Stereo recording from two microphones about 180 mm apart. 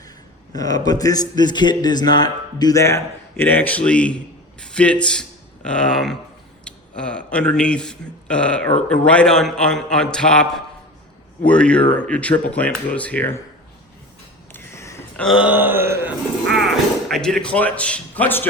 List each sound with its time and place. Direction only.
0.5 s a man's voice: 20° left (ahead or behind)
14.5 s a sound: 15° left (ahead or behind); by 16.1 s 10° right (ahead or behind)
17.1 s speech: 5° left (ahead or behind)